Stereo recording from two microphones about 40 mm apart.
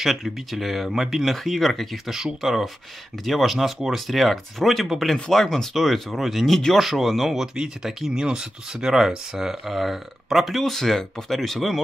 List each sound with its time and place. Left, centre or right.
0.0 s speech: centre
2.4 s speech: centre
7.5 s speech: centre